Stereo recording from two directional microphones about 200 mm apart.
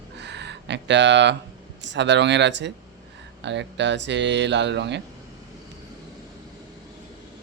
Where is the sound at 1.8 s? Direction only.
60° right (ahead or behind).